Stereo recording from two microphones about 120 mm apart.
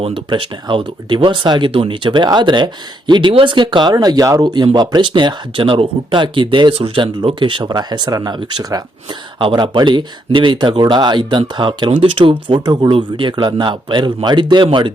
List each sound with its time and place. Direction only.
0.0 s speech: 45° right (ahead or behind)